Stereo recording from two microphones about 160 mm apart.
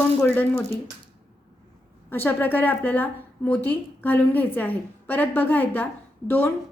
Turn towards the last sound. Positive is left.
turn(degrees=15)  # may be behind; listen again after turning